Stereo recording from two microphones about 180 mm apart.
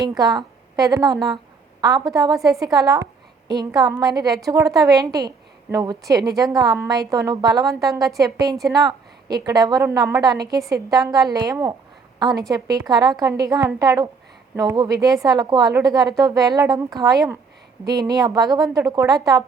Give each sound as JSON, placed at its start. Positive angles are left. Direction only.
{"t": 0.2, "sound": "a woman's voice", "side_deg": -20}
{"t": 8.0, "sound": "a woman's voice", "side_deg": 0}
{"t": 9.5, "sound": "a woman's voice", "side_deg": -20}